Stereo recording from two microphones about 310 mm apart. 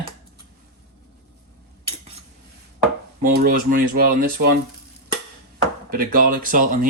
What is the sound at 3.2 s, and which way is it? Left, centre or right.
Speech, right.